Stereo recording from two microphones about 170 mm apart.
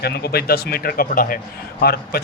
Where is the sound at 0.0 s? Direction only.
70° left (ahead or behind).